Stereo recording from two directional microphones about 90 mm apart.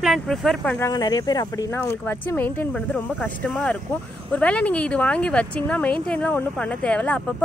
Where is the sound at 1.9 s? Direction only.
25° left (ahead or behind).